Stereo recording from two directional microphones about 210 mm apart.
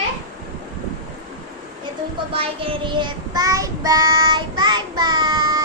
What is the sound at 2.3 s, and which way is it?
Child singing, 25° right (ahead or behind).